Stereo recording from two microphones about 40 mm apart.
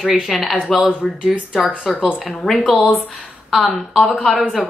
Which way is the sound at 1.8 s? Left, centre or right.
Centre.